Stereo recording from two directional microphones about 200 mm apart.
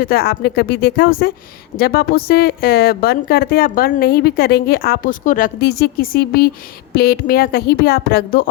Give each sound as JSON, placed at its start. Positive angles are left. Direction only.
{"t": 0.0, "sound": "a woman's voice", "side_deg": 50}